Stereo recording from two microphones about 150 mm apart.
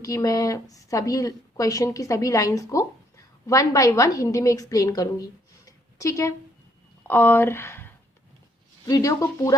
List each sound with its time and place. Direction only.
0.0 s a woman's voice: 25° left (ahead or behind)